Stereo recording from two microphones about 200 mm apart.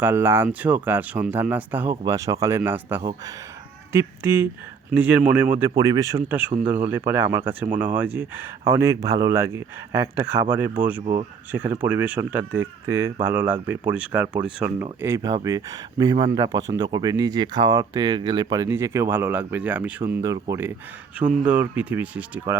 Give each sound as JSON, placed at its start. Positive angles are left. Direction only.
{"t": 0.0, "sound": "speech", "side_deg": -10}
{"t": 3.0, "sound": "speech", "side_deg": -25}
{"t": 3.9, "sound": "speech", "side_deg": -15}
{"t": 11.0, "sound": "speech", "side_deg": -25}
{"t": 11.5, "sound": "speech", "side_deg": -10}